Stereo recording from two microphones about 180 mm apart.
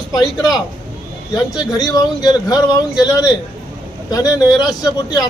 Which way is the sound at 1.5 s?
20° left (ahead or behind).